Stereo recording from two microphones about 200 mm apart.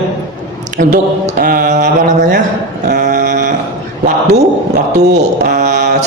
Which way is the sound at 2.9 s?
45° right (ahead or behind).